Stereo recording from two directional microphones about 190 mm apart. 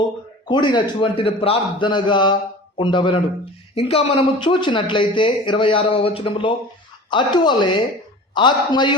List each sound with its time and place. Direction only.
0.4 s a man's voice: 25° left (ahead or behind)